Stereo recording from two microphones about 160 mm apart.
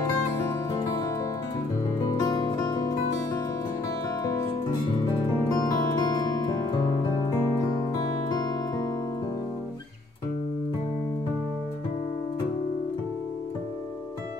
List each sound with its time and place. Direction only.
0.7 s music: 20° left (ahead or behind)
5.6 s music: 25° left (ahead or behind)